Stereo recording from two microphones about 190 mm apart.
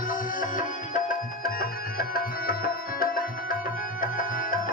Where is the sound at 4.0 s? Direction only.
45° left (ahead or behind).